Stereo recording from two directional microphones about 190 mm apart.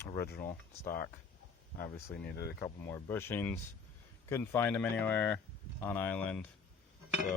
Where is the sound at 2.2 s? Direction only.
60° left (ahead or behind).